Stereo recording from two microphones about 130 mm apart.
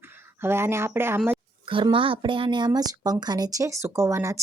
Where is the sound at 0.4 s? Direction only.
20° right (ahead or behind).